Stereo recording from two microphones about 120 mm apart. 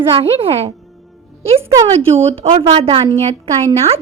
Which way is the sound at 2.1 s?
50° right (ahead or behind).